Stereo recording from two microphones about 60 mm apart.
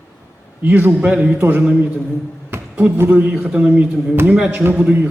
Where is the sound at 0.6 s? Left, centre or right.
Right.